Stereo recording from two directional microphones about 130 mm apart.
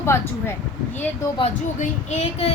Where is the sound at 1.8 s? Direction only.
60° left (ahead or behind).